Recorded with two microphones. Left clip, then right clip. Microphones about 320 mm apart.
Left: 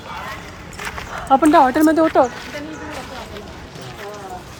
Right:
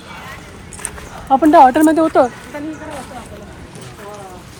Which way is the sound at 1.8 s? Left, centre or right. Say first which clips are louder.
Right 2 dB; right.